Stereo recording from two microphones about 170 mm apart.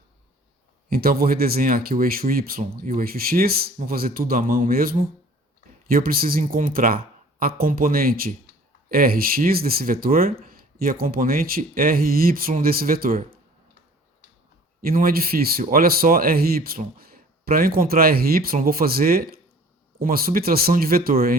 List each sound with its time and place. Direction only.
0.9 s speech: 60° right (ahead or behind)
14.8 s speech: 60° right (ahead or behind)